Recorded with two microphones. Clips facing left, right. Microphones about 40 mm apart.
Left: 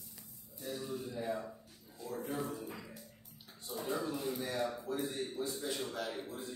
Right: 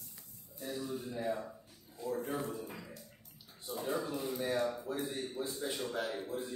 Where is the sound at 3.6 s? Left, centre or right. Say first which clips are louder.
Right 1 dB; centre.